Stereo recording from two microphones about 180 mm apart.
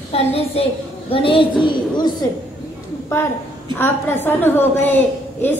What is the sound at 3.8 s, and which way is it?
A woman's voice, 10° left (ahead or behind).